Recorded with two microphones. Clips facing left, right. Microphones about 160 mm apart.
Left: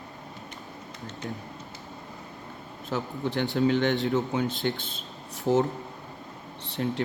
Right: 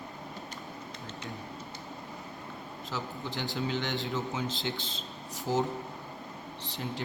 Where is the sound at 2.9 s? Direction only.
60° left (ahead or behind).